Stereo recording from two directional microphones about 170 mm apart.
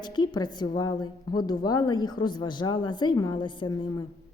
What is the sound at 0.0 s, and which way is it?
A woman's voice, 25° left (ahead or behind).